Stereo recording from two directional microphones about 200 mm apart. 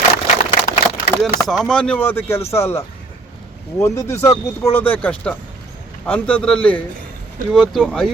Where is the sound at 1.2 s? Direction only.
Centre (ahead or behind).